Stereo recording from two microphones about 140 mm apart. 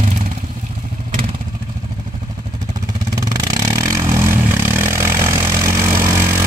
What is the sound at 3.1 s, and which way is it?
Vehicle, 25° right (ahead or behind).